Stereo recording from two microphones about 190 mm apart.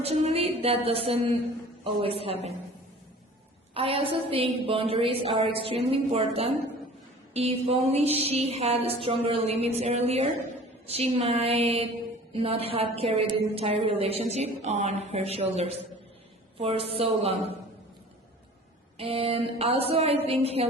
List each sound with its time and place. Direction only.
0.0 s a woman's voice: 30° right (ahead or behind)
3.8 s a woman's voice: 30° right (ahead or behind)
18.9 s a woman's voice: 30° right (ahead or behind)